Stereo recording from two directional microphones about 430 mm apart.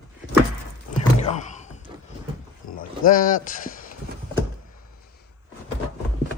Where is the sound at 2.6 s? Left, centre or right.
Left.